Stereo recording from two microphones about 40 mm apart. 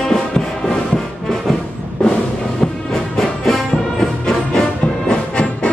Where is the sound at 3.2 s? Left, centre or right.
Centre.